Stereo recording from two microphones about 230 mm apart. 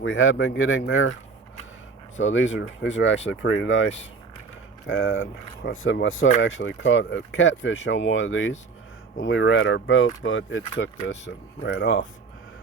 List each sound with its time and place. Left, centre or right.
0.0 s speech: left
2.2 s speech: left